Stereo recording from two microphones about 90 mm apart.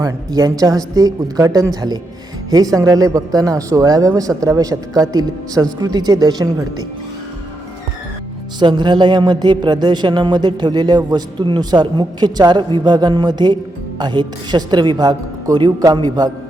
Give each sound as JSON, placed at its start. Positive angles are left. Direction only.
{"t": 0.0, "sound": "speech", "side_deg": -45}
{"t": 8.5, "sound": "speech", "side_deg": -55}